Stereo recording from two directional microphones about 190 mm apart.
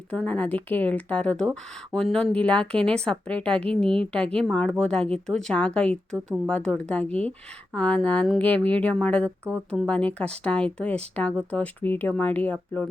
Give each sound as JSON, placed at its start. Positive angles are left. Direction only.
{"t": 0.1, "sound": "a woman's voice", "side_deg": 5}